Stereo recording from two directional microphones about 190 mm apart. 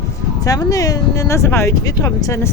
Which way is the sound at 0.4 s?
20° left (ahead or behind).